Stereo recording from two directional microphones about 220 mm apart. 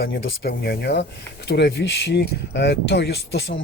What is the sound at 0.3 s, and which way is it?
Speech, 45° left (ahead or behind).